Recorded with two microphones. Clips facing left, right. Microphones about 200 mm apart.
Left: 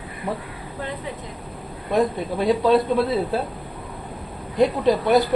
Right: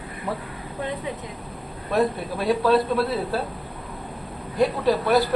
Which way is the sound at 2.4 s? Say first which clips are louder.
Left 2 dB; 20° left (ahead or behind).